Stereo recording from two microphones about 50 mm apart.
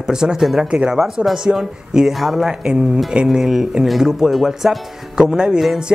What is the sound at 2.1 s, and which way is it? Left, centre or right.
Speech, centre.